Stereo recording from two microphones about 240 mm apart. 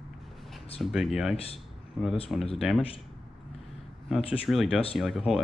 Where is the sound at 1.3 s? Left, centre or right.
Left.